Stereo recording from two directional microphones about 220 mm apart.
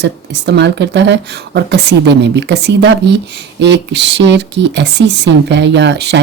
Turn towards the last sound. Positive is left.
turn(degrees=-50)  # may be behind; listen again after turning